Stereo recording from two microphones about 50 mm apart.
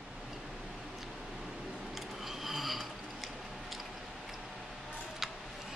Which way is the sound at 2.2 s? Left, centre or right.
Centre.